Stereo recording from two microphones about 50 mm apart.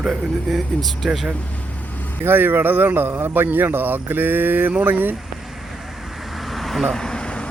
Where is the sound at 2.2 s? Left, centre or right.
Right.